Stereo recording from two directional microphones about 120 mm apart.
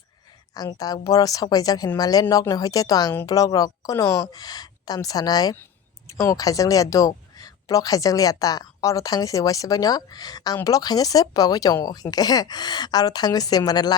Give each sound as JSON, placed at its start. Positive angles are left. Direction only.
{"t": 0.5, "sound": "speech", "side_deg": 30}